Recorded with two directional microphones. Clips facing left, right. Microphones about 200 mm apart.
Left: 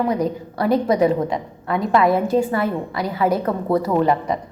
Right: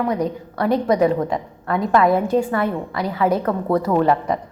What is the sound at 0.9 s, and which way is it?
Speech, 25° left (ahead or behind).